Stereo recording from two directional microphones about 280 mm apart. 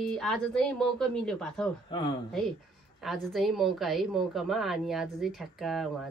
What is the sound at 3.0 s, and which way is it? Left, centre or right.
Speech, centre.